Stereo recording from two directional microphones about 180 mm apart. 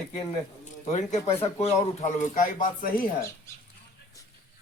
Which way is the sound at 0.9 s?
40° left (ahead or behind).